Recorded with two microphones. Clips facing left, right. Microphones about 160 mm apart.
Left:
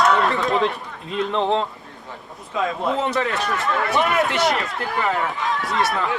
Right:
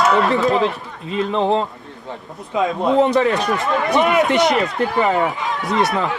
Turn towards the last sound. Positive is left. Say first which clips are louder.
# right 4 dB
turn(degrees=0)  # may be behind; listen again after turning